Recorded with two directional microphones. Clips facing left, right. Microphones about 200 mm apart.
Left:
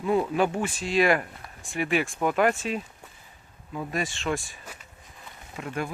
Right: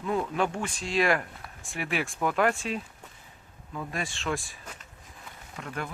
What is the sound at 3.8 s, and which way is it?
Speech, centre (ahead or behind).